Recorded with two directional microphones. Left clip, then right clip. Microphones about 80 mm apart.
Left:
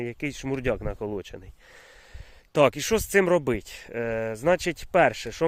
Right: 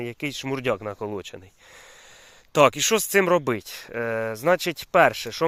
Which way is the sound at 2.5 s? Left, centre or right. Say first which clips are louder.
Right 3 dB; left.